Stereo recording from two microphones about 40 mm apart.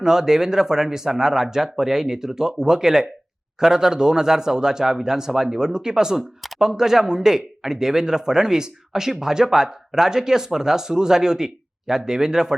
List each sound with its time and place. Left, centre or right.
0.0 s speech: centre